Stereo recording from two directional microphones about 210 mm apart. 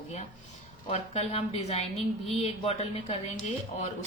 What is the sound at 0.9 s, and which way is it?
A woman's voice, 30° left (ahead or behind).